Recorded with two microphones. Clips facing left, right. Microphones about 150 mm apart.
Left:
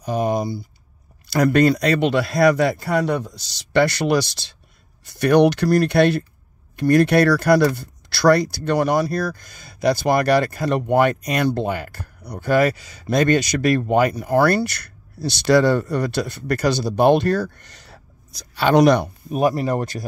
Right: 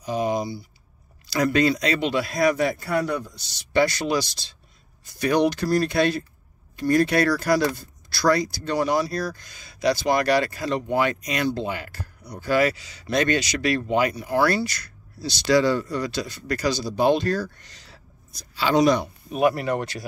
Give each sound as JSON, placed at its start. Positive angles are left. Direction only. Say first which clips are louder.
{"t": 0.0, "sound": "a man's voice", "louder": "left 3 dB", "side_deg": 55}
{"t": 19.3, "sound": "speech", "louder": "left 2 dB", "side_deg": 35}